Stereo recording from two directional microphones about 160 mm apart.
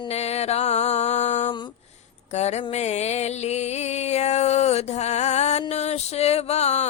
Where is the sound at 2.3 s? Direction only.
45° left (ahead or behind).